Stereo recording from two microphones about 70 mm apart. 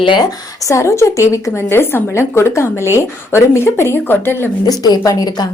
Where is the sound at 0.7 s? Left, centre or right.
Left.